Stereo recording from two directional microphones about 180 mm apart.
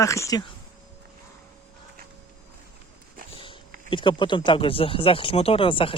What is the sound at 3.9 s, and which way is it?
Speech, 25° left (ahead or behind).